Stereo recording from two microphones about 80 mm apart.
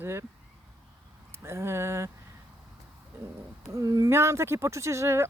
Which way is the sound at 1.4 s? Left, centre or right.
Right.